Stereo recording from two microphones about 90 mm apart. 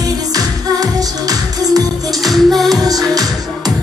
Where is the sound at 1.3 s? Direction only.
45° right (ahead or behind).